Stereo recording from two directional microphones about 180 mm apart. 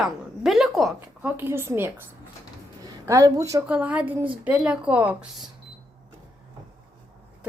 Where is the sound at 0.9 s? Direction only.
10° right (ahead or behind).